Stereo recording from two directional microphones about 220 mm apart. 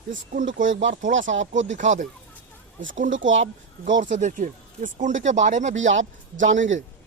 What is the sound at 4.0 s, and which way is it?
Speech, 35° right (ahead or behind).